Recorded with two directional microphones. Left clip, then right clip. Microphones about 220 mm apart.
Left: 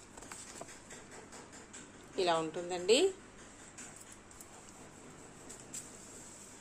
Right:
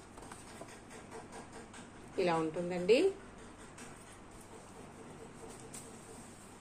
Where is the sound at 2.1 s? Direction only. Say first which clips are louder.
Left 1 dB; 20° left (ahead or behind).